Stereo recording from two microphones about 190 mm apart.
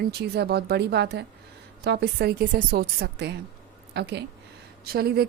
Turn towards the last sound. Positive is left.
turn(degrees=-55)  # may be behind; listen again after turning